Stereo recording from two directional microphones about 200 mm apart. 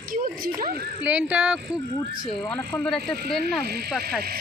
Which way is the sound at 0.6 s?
45° right (ahead or behind).